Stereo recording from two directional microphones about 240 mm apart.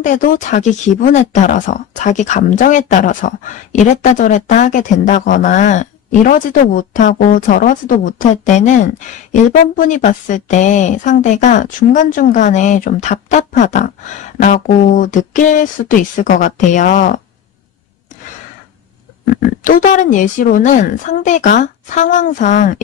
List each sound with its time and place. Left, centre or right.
0.0 s speech: left
19.6 s speech: left